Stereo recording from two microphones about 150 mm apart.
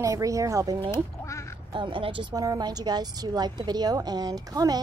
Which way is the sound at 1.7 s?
35° right (ahead or behind).